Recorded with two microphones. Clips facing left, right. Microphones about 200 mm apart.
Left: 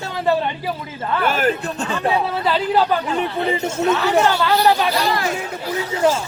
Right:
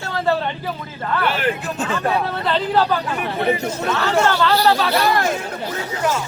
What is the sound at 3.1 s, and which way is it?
Speech, 25° left (ahead or behind).